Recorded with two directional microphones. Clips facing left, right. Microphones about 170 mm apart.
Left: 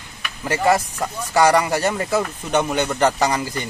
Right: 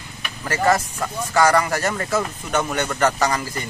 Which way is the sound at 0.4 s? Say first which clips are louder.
Left 1 dB; 15° left (ahead or behind).